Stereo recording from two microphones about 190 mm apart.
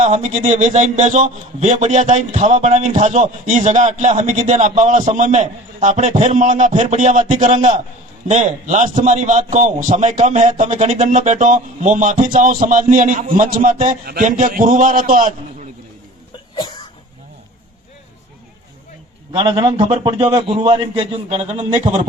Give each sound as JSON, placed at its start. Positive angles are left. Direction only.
{"t": 0.0, "sound": "a man's voice", "side_deg": -35}
{"t": 16.6, "sound": "throat clearing", "side_deg": 25}
{"t": 19.3, "sound": "a man's voice", "side_deg": -25}